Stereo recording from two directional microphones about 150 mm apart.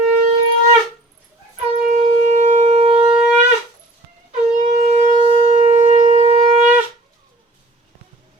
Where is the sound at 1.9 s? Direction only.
55° right (ahead or behind).